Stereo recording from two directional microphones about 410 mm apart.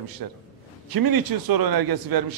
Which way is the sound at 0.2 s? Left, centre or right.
Right.